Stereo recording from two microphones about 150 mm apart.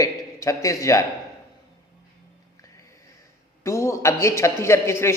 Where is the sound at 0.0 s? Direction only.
20° left (ahead or behind).